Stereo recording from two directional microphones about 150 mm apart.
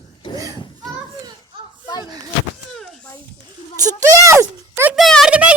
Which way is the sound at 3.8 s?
20° right (ahead or behind).